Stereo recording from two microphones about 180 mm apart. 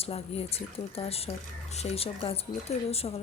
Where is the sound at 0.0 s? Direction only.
35° left (ahead or behind).